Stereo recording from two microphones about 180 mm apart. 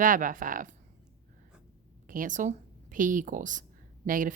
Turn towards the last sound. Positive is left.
turn(degrees=-50)  # may be behind; listen again after turning